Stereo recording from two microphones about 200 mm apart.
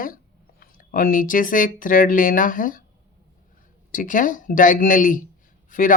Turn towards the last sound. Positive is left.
turn(degrees=40)  # may be behind; listen again after turning